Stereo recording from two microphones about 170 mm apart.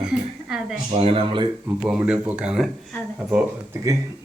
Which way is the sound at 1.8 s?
5° right (ahead or behind).